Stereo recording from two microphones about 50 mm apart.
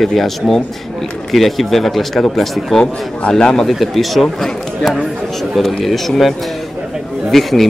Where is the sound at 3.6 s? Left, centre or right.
Centre.